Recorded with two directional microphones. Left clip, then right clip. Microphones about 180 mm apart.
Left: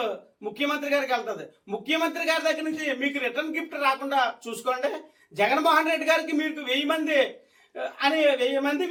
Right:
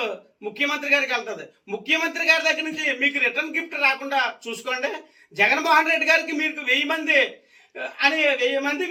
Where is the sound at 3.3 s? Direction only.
5° left (ahead or behind).